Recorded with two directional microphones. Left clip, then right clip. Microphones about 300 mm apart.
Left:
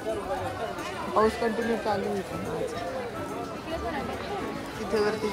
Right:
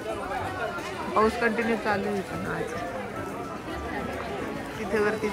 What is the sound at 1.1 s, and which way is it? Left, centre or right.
Speech, centre.